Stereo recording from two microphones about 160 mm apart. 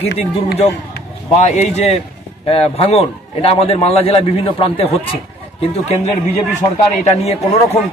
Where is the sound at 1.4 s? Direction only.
45° left (ahead or behind).